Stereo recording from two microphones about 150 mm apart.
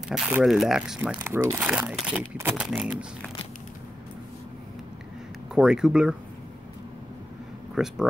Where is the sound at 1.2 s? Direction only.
15° right (ahead or behind).